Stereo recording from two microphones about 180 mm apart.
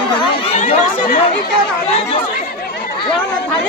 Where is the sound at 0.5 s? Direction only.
45° left (ahead or behind).